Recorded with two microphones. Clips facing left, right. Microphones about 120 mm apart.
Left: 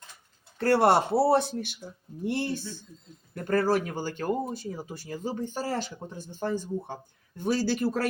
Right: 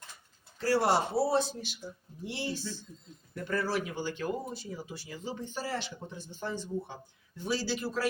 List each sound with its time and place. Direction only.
0.6 s speech: 60° left (ahead or behind)